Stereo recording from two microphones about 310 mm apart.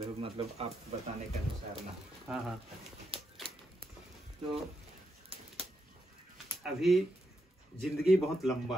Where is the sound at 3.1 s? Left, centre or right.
Centre.